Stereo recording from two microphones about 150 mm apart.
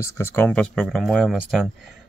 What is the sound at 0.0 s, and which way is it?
Speech, 15° left (ahead or behind).